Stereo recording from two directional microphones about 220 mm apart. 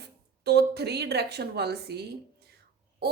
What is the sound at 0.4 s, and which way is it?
A woman's voice, 50° right (ahead or behind).